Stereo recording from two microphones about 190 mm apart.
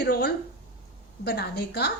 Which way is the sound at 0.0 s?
60° left (ahead or behind).